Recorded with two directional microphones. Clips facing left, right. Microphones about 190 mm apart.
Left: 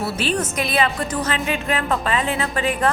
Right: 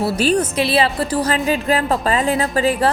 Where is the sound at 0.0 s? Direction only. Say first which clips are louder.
Right 6 dB; 40° right (ahead or behind).